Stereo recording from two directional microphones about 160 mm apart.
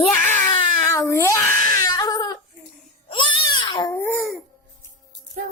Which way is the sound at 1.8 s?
20° left (ahead or behind).